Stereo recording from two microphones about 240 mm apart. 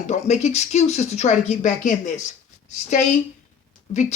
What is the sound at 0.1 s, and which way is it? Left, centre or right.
Speech, left.